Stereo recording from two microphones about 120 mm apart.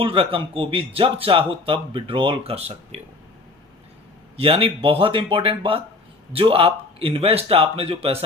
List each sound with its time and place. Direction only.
0.0 s speech: 50° right (ahead or behind)
4.4 s speech: 50° right (ahead or behind)